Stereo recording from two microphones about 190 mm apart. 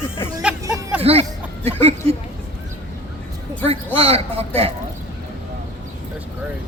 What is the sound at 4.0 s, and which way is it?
Speech, 30° right (ahead or behind).